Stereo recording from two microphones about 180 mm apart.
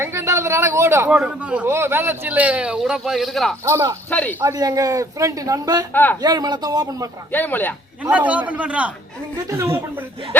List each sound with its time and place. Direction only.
0.0 s speech: 15° right (ahead or behind)
3.7 s speech: 15° right (ahead or behind)
4.1 s speech: 5° left (ahead or behind)
4.4 s speech: 15° right (ahead or behind)
5.9 s speech: 10° left (ahead or behind)
6.2 s speech: 20° right (ahead or behind)
7.3 s speech: 10° left (ahead or behind)
8.1 s speech: 10° right (ahead or behind)